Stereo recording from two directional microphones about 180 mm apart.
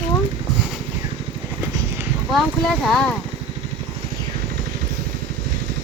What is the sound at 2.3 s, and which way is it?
Speech, centre (ahead or behind).